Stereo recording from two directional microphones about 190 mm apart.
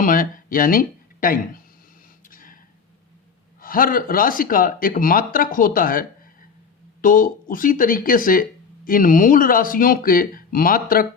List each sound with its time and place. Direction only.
0.0 s speech: 45° left (ahead or behind)
2.2 s gasp: 45° left (ahead or behind)
3.6 s speech: 50° left (ahead or behind)